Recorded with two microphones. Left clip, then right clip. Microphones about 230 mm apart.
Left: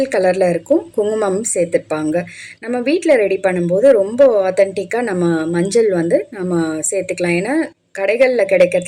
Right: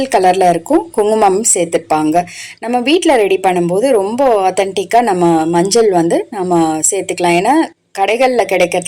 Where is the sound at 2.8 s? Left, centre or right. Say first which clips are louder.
Right 4 dB; right.